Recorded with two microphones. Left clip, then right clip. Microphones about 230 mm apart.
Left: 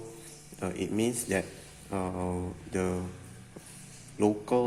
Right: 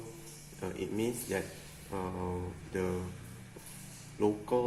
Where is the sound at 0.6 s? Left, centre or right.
Left.